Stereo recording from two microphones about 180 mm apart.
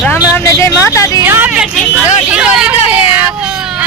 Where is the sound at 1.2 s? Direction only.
10° right (ahead or behind).